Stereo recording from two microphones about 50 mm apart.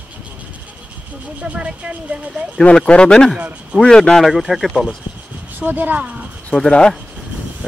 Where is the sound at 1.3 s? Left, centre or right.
Right.